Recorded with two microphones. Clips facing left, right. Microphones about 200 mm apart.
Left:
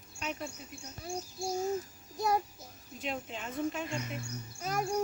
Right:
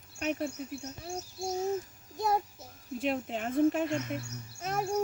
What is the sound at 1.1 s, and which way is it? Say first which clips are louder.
Speech: left 1 dB; centre (ahead or behind).